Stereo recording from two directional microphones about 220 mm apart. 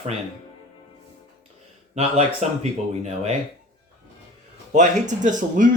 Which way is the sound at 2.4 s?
30° right (ahead or behind).